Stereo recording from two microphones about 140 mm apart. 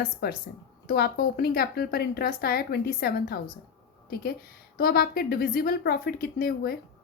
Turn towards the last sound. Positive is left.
turn(degrees=90)